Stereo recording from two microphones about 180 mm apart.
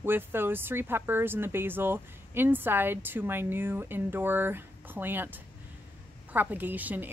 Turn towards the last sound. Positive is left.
turn(degrees=-10)  # may be behind; listen again after turning